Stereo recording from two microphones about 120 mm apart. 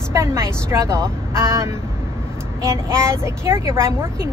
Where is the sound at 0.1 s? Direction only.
25° right (ahead or behind).